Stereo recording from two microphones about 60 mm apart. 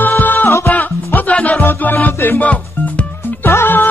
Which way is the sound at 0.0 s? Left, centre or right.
Left.